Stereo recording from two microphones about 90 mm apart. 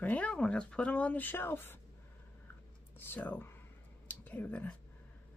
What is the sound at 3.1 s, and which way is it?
A woman's voice, 20° left (ahead or behind).